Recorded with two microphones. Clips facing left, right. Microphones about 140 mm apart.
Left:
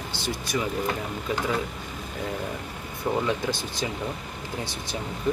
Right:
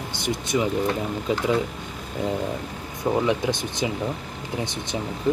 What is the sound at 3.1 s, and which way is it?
Speech, 15° right (ahead or behind).